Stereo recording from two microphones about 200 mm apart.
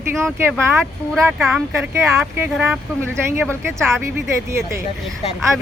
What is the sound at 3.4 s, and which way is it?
Speech, 5° left (ahead or behind).